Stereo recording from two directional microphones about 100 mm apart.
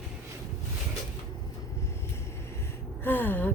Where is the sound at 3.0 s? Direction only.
20° left (ahead or behind).